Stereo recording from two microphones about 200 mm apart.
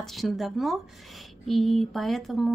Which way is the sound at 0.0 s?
Centre (ahead or behind).